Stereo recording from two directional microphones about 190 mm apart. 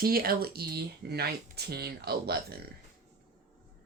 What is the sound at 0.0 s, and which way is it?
Speech, 50° right (ahead or behind).